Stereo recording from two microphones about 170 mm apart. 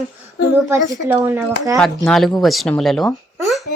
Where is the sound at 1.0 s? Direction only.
15° right (ahead or behind).